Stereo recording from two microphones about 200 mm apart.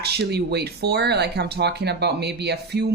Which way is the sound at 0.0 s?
55° right (ahead or behind).